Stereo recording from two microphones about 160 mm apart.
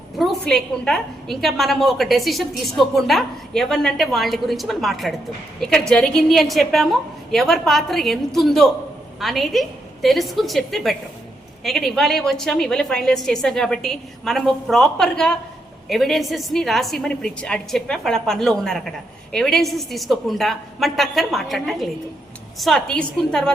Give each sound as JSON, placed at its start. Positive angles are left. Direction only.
{"t": 0.2, "sound": "a woman's voice", "side_deg": 0}